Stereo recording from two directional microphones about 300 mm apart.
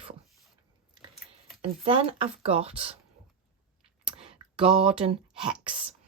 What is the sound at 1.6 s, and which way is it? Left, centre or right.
Speech, centre.